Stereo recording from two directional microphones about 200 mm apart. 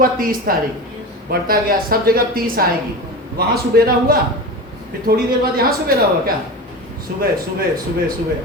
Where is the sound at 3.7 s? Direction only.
50° right (ahead or behind).